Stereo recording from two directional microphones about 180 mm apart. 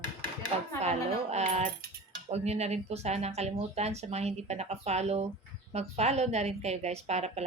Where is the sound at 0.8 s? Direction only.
35° right (ahead or behind).